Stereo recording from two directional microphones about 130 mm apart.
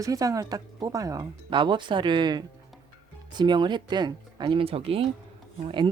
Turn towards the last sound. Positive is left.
turn(degrees=-40)  # may be behind; listen again after turning